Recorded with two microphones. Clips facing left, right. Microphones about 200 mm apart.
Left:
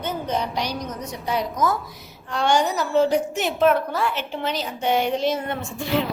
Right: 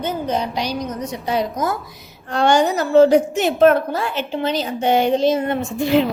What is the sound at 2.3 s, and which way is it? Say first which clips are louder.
A woman's voice: right 5 dB; 55° right (ahead or behind).